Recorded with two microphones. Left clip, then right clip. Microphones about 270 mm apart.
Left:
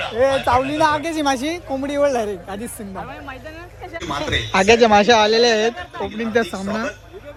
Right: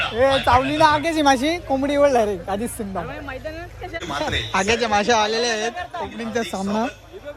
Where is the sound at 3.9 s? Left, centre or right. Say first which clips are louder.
Left 1 dB; left.